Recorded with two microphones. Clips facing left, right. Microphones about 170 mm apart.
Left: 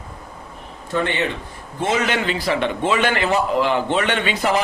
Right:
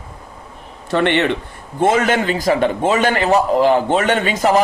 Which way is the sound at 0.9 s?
75° right (ahead or behind).